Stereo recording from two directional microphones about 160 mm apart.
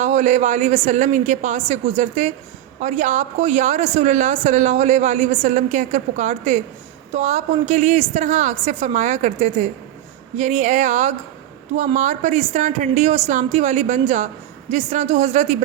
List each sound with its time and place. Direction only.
0.0 s a woman's voice: 50° right (ahead or behind)